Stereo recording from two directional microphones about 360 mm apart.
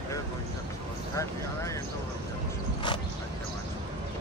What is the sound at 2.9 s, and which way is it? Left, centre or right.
Vehicle, centre.